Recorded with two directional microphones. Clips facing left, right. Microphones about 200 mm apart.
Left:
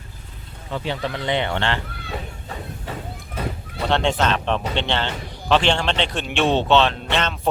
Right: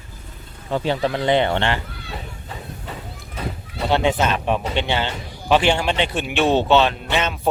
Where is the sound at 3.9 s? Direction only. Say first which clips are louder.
Right 1 dB; 5° right (ahead or behind).